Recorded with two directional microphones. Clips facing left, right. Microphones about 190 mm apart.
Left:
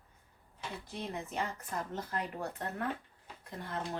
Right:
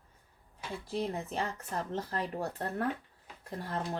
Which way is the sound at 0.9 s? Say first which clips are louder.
Right 8 dB; 30° right (ahead or behind).